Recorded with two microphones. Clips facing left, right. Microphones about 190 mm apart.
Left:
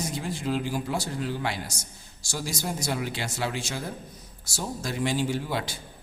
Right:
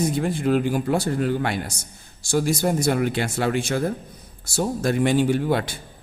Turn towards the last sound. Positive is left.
turn(degrees=-55)  # may be behind; listen again after turning